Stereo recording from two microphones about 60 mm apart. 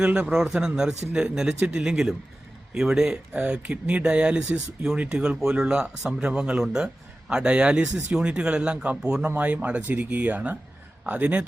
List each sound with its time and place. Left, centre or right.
0.0 s speech: centre